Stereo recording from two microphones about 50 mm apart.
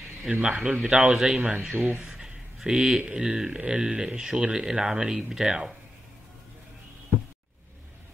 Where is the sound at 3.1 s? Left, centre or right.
Centre.